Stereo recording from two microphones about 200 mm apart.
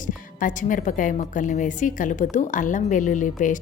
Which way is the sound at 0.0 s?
40° left (ahead or behind).